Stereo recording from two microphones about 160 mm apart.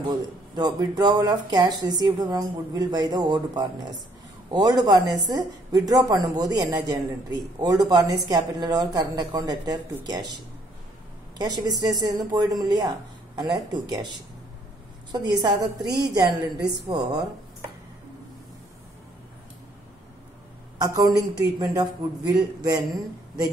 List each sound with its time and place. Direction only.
0.0 s a woman's voice: 25° right (ahead or behind)
20.8 s a woman's voice: 25° right (ahead or behind)